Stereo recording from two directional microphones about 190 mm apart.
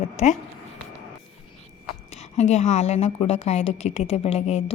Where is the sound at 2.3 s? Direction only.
35° left (ahead or behind).